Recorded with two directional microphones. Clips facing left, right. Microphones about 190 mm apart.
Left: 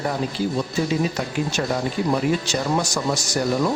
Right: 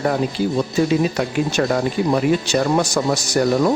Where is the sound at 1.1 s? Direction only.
60° right (ahead or behind).